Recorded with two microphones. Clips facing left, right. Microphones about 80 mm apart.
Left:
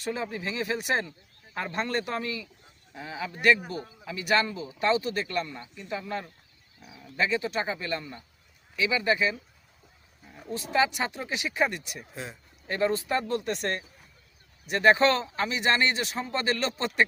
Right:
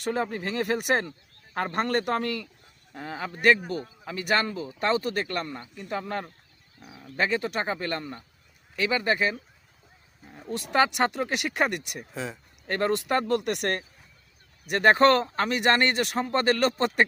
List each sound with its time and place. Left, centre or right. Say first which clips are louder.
0.0 s speech: right 4 dB; right
10.5 s speech: right 2 dB; right